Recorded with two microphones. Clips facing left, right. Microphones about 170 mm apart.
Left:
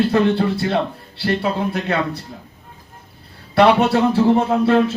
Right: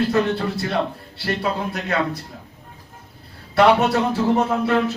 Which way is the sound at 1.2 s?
25° left (ahead or behind).